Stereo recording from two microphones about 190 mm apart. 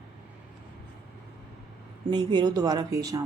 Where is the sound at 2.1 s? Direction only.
25° right (ahead or behind).